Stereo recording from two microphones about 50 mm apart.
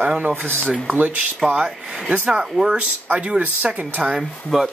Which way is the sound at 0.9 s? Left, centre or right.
Right.